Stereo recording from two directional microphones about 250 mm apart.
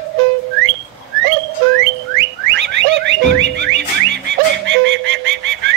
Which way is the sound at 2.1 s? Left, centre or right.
Right.